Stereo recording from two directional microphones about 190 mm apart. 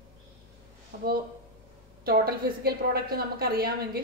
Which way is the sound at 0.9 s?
50° right (ahead or behind).